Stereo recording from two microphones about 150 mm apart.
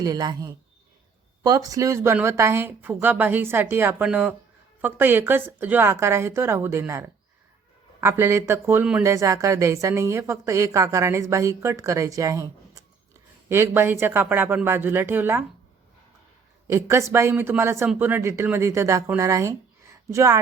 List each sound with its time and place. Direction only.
0.0 s a woman's voice: 25° right (ahead or behind)
8.0 s speech: 20° right (ahead or behind)
9.0 s a woman's voice: 20° right (ahead or behind)
16.6 s speech: 20° right (ahead or behind)